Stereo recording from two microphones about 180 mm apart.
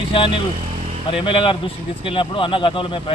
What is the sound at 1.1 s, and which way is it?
A man's voice, 30° left (ahead or behind).